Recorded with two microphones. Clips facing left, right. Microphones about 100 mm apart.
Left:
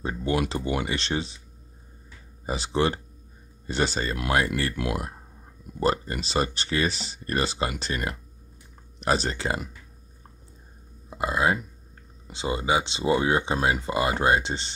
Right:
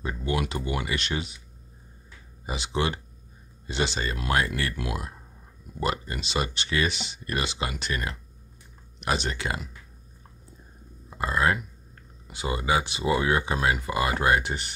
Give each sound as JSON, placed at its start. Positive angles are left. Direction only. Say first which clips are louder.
{"t": 0.0, "sound": "speech", "louder": "left 3 dB", "side_deg": 35}
{"t": 2.4, "sound": "speech", "louder": "left 3 dB", "side_deg": 35}
{"t": 4.7, "sound": "speech", "louder": "left 4 dB", "side_deg": 55}
{"t": 5.8, "sound": "speech", "louder": "left 4 dB", "side_deg": 35}
{"t": 11.1, "sound": "speech", "louder": "left 1 dB", "side_deg": 15}